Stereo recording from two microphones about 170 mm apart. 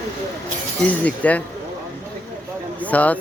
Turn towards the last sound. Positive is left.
turn(degrees=10)  # may be behind; listen again after turning